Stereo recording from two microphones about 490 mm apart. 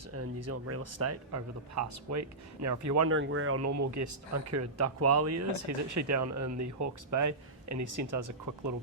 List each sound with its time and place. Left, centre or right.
0.1 s speech: right